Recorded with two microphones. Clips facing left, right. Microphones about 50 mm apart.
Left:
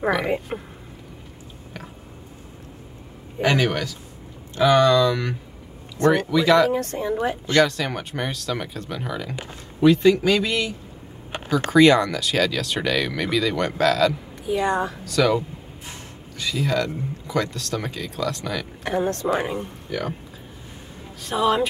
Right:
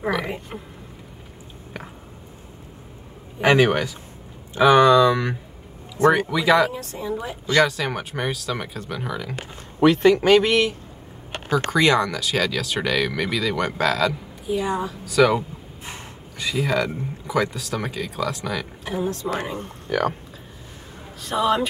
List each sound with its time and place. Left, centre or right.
3.3 s speech: right
6.7 s a woman's voice: left
7.1 s a woman's voice: left
7.6 s speech: centre
9.8 s a man's voice: right
11.5 s speech: centre
14.5 s a woman's voice: left
15.0 s speech: centre
15.8 s snort: right
16.4 s speech: centre
18.9 s a woman's voice: left
19.6 s speech: right
21.2 s speech: centre